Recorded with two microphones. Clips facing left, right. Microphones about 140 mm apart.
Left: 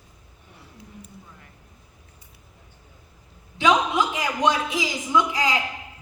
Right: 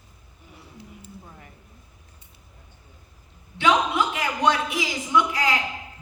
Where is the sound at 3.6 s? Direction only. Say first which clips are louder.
Left 1 dB; 20° left (ahead or behind).